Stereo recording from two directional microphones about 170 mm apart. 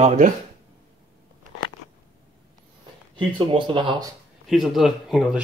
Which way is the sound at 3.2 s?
30° right (ahead or behind).